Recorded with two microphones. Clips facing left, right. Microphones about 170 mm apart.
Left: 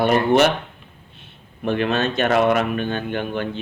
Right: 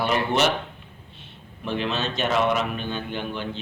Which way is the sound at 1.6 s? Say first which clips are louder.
Left 6 dB; 55° left (ahead or behind).